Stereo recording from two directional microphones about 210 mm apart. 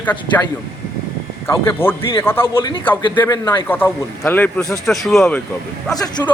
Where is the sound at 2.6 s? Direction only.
25° left (ahead or behind); by 5.4 s centre (ahead or behind).